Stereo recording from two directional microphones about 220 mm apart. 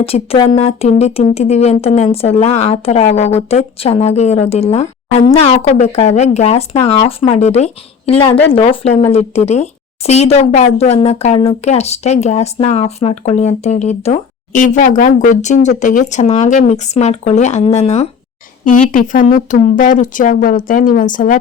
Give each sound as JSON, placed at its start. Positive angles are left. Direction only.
{"t": 0.0, "sound": "speech", "side_deg": 25}